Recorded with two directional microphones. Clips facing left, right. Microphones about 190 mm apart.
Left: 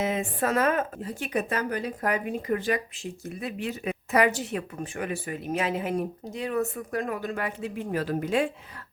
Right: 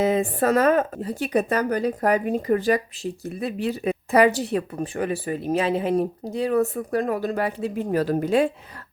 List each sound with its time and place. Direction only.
0.0 s speech: 35° right (ahead or behind)